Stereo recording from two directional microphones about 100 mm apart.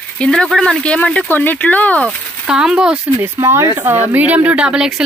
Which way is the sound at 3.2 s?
25° right (ahead or behind).